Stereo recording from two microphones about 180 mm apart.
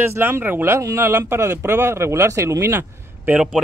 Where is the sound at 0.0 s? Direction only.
15° right (ahead or behind).